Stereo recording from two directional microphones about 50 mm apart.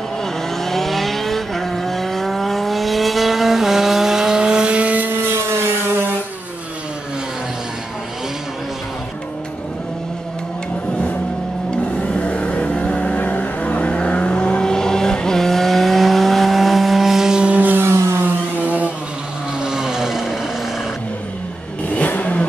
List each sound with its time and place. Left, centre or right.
0.2 s vehicle: centre; by 5.1 s right
5.3 s vehicle: right
11.8 s vehicle: left; by 17.5 s centre
17.5 s vehicle: right
17.8 s vehicle: right
18.2 s a sound: right
19.6 s vehicle: centre
21.9 s vehicle: left